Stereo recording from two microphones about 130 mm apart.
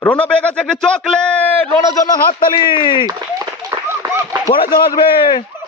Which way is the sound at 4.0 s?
25° right (ahead or behind).